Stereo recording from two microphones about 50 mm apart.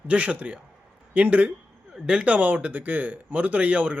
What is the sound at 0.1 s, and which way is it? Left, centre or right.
Speech, right.